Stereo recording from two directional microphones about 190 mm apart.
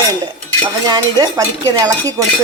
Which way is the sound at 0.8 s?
20° right (ahead or behind).